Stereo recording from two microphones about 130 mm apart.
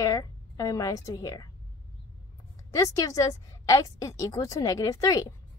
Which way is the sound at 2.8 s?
25° left (ahead or behind).